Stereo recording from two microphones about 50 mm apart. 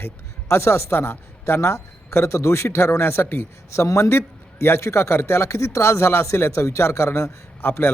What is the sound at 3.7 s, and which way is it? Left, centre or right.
A man's voice, left.